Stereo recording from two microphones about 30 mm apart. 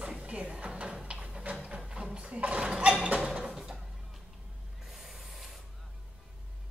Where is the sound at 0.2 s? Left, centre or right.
Right.